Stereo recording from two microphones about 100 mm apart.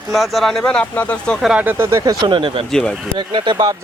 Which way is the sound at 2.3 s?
55° right (ahead or behind).